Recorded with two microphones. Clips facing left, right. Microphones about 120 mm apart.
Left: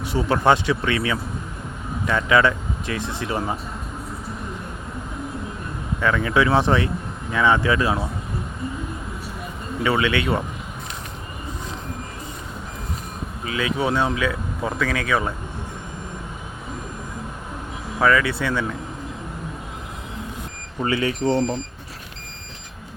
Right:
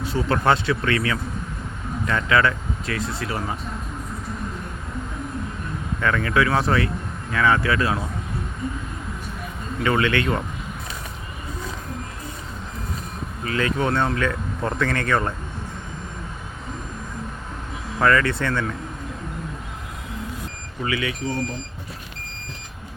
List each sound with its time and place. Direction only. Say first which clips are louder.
0.0 s speech: left 2 dB; 15° left (ahead or behind)
6.0 s speech: left 1 dB; 10° left (ahead or behind)
9.8 s speech: even; 10° left (ahead or behind)
13.4 s speech: even; 10° left (ahead or behind)
18.0 s speech: even; 5° left (ahead or behind)
20.8 s speech: left 4 dB; 35° left (ahead or behind)